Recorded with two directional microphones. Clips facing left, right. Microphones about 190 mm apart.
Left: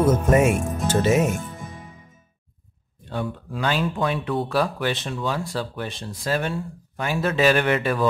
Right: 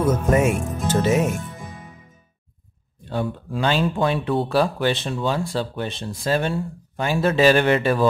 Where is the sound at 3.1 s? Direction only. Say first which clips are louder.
Right 3 dB; 30° right (ahead or behind).